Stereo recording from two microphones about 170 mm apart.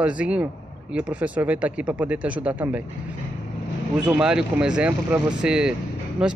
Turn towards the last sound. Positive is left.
turn(degrees=-5)  # may be behind; listen again after turning